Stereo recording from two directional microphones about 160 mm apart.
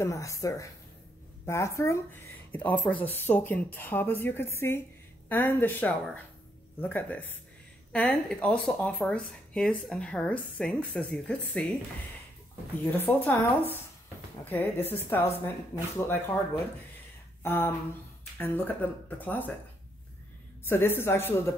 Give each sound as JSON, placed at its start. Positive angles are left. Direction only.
{"t": 0.0, "sound": "a woman's voice", "side_deg": 20}
{"t": 12.8, "sound": "speech", "side_deg": 10}
{"t": 14.4, "sound": "speech", "side_deg": 10}
{"t": 17.4, "sound": "a sound", "side_deg": 15}
{"t": 18.4, "sound": "speech", "side_deg": 10}
{"t": 20.6, "sound": "speech", "side_deg": 15}